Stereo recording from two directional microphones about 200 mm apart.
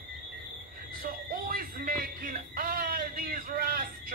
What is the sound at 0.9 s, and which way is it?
Music, 45° right (ahead or behind).